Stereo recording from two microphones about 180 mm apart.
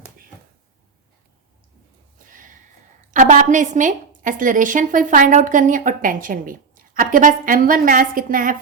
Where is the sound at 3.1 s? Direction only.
45° right (ahead or behind).